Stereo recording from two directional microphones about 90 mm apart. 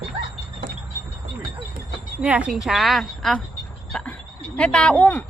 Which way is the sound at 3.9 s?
10° left (ahead or behind).